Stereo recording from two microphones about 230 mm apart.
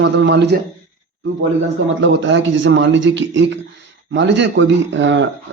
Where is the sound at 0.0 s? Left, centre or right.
Right.